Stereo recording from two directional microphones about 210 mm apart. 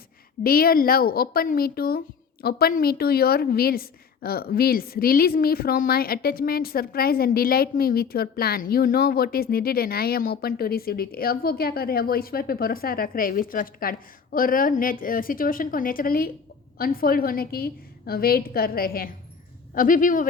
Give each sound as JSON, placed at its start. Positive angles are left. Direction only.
{"t": 0.4, "sound": "a woman's voice", "side_deg": 45}